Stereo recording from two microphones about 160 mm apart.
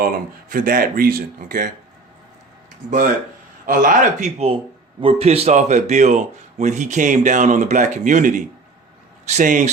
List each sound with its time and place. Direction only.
0.5 s speech: 60° right (ahead or behind)
2.8 s speech: 50° right (ahead or behind)
4.4 s speech: 35° right (ahead or behind); by 9.6 s 50° right (ahead or behind)